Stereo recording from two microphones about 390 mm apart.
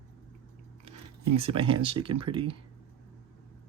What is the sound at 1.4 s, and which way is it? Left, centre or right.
Speech, centre.